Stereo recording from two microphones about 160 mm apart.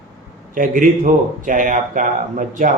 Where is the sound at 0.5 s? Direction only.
55° right (ahead or behind).